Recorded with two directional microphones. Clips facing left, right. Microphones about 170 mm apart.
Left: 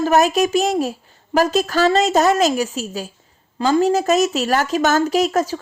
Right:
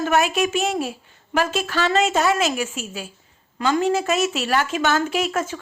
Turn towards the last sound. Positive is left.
turn(degrees=35)  # may be behind; listen again after turning